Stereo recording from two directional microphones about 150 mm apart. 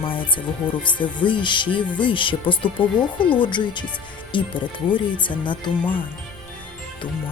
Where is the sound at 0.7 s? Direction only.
30° left (ahead or behind).